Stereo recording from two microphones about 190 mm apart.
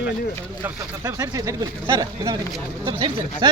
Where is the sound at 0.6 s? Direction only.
15° right (ahead or behind).